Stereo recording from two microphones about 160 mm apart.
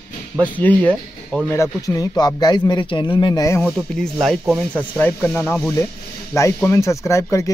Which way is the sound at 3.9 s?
Centre (ahead or behind).